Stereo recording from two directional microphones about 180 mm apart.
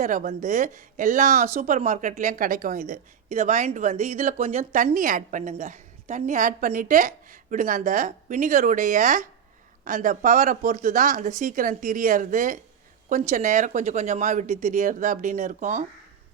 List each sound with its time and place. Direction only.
0.0 s a woman's voice: 45° right (ahead or behind)